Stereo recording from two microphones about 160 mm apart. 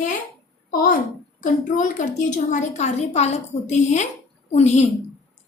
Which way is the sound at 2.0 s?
50° left (ahead or behind).